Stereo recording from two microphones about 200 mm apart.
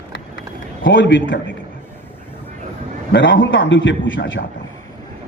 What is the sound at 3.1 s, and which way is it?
A man's voice, 65° left (ahead or behind).